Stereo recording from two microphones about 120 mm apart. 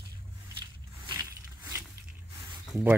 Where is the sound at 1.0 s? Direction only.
25° right (ahead or behind).